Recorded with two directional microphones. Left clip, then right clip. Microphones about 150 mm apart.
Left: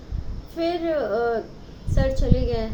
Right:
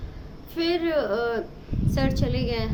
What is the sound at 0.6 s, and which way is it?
A woman's voice, 20° right (ahead or behind).